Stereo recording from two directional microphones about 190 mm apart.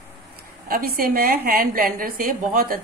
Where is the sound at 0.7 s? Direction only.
50° right (ahead or behind).